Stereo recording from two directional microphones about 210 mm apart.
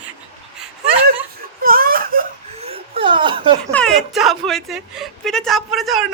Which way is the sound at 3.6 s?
5° left (ahead or behind).